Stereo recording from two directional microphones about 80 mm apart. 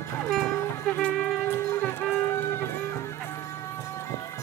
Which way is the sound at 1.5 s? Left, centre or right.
Left.